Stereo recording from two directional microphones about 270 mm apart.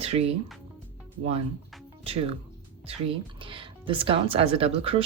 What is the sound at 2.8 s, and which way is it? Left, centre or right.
Speech, centre.